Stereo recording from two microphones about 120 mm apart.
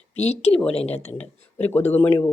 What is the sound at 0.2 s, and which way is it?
Speech, 60° left (ahead or behind).